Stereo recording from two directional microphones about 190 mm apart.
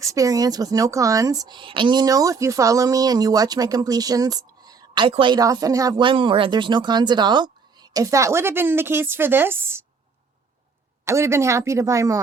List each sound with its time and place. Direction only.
0.0 s speech: 15° right (ahead or behind)
11.0 s speech: 15° right (ahead or behind)